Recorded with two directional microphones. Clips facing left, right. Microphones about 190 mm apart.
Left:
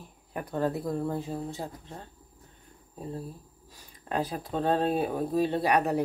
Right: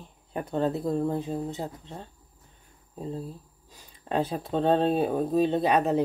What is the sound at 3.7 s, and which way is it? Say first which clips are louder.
Speech: right 3 dB; 25° right (ahead or behind).